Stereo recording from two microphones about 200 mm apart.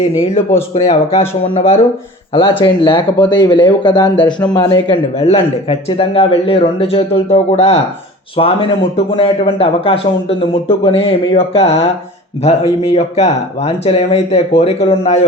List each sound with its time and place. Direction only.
0.7 s speech: 30° left (ahead or behind)
5.2 s speech: 30° left (ahead or behind)